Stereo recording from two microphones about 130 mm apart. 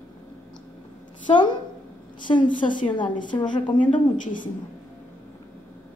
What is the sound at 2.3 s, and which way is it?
Speech, 90° left.